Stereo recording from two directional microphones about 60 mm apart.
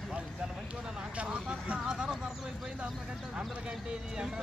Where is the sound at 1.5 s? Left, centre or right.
Centre.